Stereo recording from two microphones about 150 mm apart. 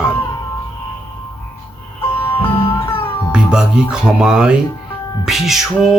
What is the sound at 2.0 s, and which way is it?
Music, 15° left (ahead or behind).